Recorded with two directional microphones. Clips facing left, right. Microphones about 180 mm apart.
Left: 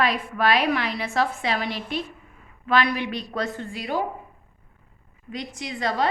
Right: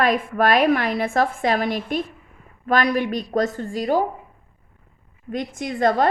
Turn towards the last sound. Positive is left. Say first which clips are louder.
# right 6 dB
turn(degrees=-50)  # may be behind; listen again after turning